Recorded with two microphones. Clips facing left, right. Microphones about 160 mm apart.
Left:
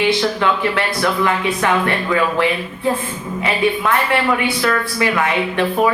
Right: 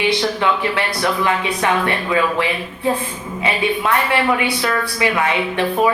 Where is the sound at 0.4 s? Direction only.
20° right (ahead or behind).